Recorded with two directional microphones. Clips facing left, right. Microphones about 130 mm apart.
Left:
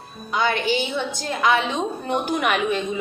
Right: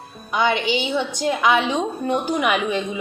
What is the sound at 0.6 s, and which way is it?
Speech, 45° left (ahead or behind).